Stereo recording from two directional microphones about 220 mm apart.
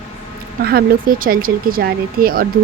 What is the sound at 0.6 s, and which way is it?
A woman's voice, 45° right (ahead or behind).